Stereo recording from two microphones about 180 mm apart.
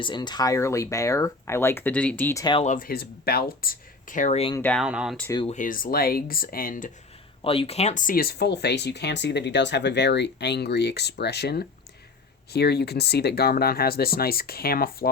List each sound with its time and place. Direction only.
0.0 s speech: 25° left (ahead or behind)
2.4 s speech: 25° left (ahead or behind)
2.6 s speech: 50° left (ahead or behind); by 4.5 s 35° left (ahead or behind)
4.5 s speech: 10° left (ahead or behind)
4.8 s speech: 5° right (ahead or behind)
5.5 s speech: 45° left (ahead or behind)
7.4 s speech: 30° left (ahead or behind); by 15.1 s 55° left (ahead or behind)